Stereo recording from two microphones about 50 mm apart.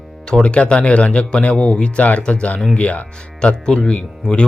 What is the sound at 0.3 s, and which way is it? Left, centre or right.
Speech, centre.